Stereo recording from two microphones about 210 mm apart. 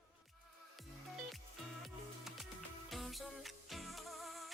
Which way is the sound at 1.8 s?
Centre (ahead or behind).